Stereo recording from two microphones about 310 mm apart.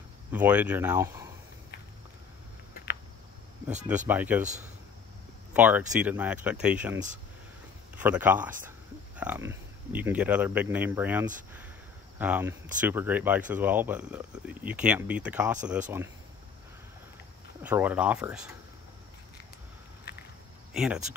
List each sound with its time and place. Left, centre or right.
0.3 s speech: centre
2.7 s a sound: left
4.1 s speech: centre
5.5 s speech: centre
17.6 s speech: centre
20.7 s speech: centre